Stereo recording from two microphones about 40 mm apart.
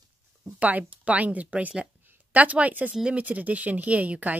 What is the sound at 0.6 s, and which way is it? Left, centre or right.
Speech, right.